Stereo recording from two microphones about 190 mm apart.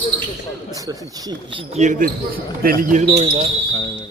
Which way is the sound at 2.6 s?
50° right (ahead or behind).